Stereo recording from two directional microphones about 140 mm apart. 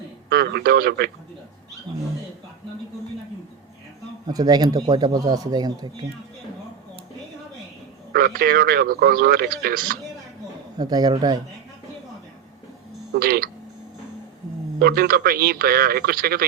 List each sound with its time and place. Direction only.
0.3 s speech: 90° right
4.3 s speech: 25° right (ahead or behind)
8.1 s speech: 90° right
10.8 s speech: 30° right (ahead or behind)
13.1 s speech: 90° right
14.8 s speech: 90° right